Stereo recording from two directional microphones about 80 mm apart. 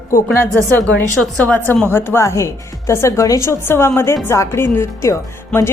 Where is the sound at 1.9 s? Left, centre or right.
Left.